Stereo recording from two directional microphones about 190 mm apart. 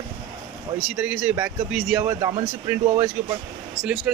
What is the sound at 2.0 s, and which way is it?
Speech, 15° right (ahead or behind).